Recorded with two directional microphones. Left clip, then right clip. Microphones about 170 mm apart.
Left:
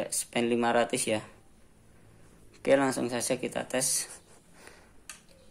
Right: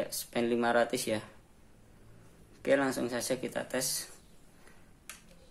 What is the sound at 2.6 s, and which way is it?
Speech, 25° left (ahead or behind).